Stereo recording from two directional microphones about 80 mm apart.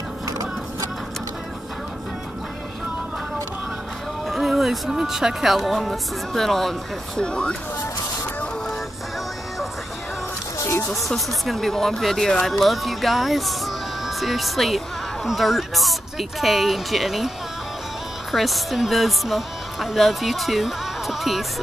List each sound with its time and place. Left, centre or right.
4.3 s speech: centre
10.6 s a sound: left
10.9 s speech: centre
18.3 s speech: centre